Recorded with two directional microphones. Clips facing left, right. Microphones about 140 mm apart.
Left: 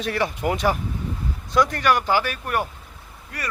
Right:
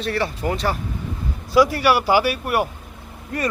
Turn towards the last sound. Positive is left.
turn(degrees=-25)  # may be behind; listen again after turning